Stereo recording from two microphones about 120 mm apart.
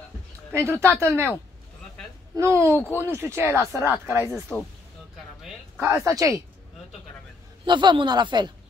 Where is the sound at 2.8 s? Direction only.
20° left (ahead or behind).